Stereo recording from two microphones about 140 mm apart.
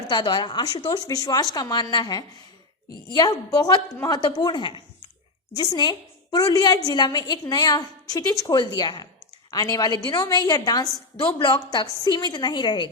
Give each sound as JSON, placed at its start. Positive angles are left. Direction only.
{"t": 0.1, "sound": "a woman's voice", "side_deg": 35}